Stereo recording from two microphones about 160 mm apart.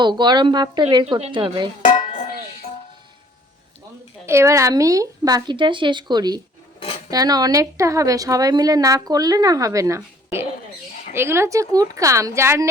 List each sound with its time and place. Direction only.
0.0 s a woman's voice: 30° right (ahead or behind)
2.0 s a sound: 55° left (ahead or behind)
4.3 s a woman's voice: 20° right (ahead or behind)